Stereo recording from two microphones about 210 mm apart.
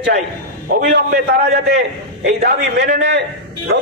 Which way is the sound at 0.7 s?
50° right (ahead or behind).